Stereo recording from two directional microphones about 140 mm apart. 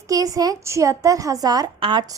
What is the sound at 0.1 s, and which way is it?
Speech, 25° right (ahead or behind).